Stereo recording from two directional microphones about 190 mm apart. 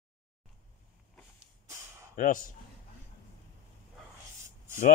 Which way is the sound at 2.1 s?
45° left (ahead or behind).